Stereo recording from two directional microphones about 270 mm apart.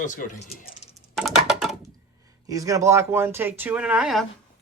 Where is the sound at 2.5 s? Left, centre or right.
Centre.